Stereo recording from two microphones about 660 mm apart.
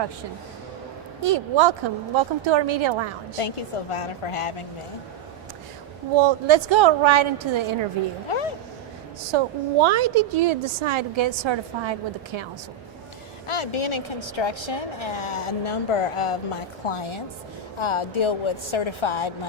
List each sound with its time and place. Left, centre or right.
1.2 s a woman's voice: right
3.3 s a woman's voice: left
6.1 s a woman's voice: right
8.3 s vehicle: left
9.8 s a woman's voice: right
13.5 s a woman's voice: left